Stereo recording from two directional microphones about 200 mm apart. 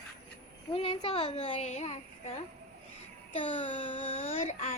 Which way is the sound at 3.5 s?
25° left (ahead or behind).